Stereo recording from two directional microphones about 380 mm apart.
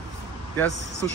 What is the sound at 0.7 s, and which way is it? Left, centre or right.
Speech, right.